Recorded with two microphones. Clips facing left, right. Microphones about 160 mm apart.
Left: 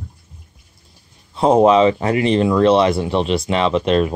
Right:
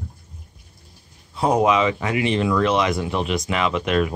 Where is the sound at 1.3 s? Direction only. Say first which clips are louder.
Left 6 dB; 25° left (ahead or behind).